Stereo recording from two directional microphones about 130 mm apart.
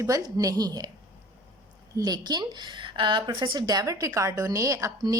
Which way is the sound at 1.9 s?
30° right (ahead or behind).